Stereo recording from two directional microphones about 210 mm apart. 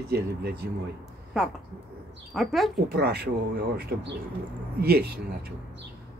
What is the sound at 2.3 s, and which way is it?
Speech, centre (ahead or behind).